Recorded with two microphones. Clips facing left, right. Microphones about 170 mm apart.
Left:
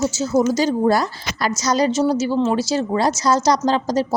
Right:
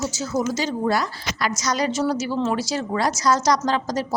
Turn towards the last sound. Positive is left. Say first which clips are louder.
# left 4 dB
turn(degrees=30)  # may be behind; listen again after turning